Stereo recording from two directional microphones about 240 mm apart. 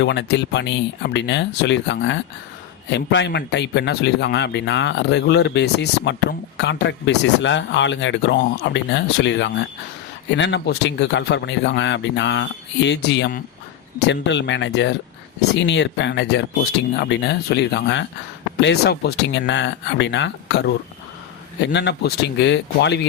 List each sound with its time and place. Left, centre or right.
0.0 s speech: left